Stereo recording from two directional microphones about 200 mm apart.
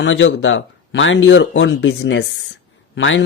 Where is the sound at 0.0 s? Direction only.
70° left (ahead or behind).